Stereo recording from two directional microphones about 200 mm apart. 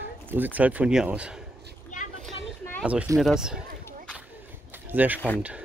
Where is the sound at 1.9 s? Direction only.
40° left (ahead or behind).